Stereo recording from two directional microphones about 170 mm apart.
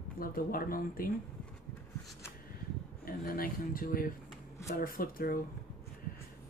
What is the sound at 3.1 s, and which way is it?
Speech, 60° left (ahead or behind).